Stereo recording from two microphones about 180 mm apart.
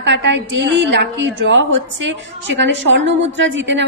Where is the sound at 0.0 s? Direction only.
85° right.